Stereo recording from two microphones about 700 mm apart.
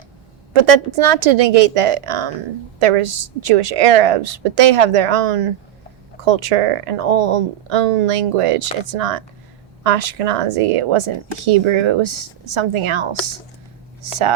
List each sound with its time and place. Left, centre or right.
0.6 s a woman's voice: right
6.2 s a woman's voice: right